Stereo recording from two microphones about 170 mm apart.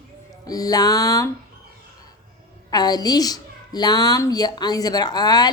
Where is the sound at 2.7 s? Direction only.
25° left (ahead or behind).